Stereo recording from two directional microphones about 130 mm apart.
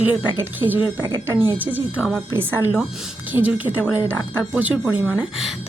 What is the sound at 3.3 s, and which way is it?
Speech, 15° right (ahead or behind).